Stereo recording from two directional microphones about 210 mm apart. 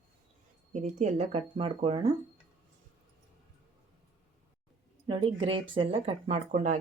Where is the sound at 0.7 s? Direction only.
35° right (ahead or behind).